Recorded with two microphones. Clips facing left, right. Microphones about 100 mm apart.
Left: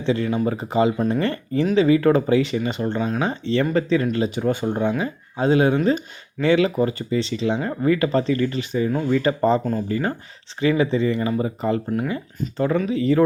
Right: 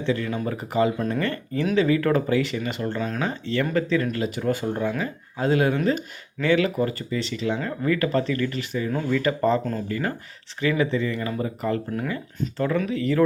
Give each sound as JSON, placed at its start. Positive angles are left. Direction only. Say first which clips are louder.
{"t": 0.0, "sound": "speech", "louder": "left 4 dB", "side_deg": 20}
{"t": 11.9, "sound": "speech", "louder": "left 4 dB", "side_deg": 10}
{"t": 12.5, "sound": "speech", "louder": "left 4 dB", "side_deg": 20}